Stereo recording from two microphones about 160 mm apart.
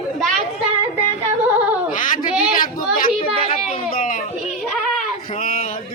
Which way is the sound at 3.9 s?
55° left (ahead or behind).